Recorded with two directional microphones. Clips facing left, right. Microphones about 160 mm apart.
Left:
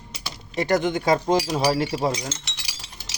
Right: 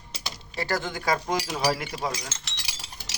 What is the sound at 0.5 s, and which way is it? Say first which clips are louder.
Speech: left 8 dB; 20° left (ahead or behind).